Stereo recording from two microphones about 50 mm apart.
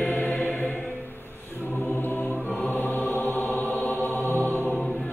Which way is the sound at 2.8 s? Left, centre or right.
Left.